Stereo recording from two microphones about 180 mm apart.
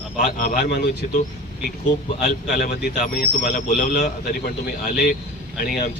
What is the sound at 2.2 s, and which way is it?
Speech, 55° left (ahead or behind).